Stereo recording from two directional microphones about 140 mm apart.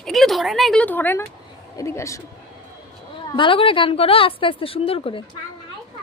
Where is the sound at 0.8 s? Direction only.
15° left (ahead or behind).